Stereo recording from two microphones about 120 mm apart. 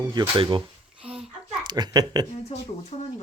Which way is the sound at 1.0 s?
10° right (ahead or behind).